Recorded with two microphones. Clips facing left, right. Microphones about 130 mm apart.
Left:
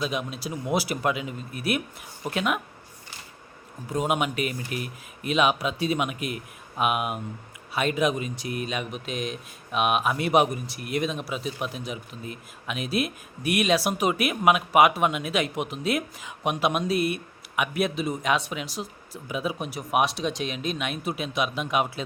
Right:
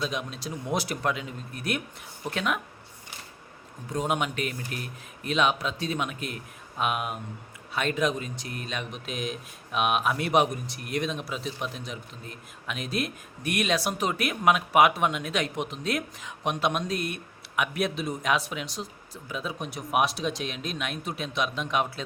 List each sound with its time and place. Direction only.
0.0 s speech: 5° left (ahead or behind)
3.8 s speech: 5° left (ahead or behind)